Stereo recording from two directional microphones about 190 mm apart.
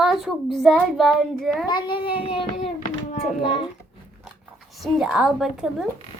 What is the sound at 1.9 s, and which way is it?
Child singing, 55° left (ahead or behind).